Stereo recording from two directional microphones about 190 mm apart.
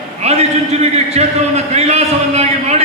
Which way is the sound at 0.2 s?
35° right (ahead or behind).